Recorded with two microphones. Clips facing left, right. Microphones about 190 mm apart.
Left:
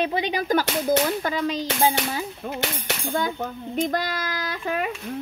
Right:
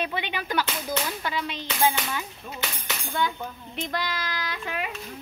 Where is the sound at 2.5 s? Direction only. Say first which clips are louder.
Left 8 dB; 70° left (ahead or behind).